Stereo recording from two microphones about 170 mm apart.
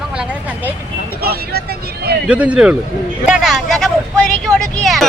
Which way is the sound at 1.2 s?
65° right (ahead or behind).